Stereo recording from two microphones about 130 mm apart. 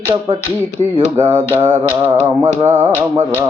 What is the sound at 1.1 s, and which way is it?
Finger snapping, 20° right (ahead or behind).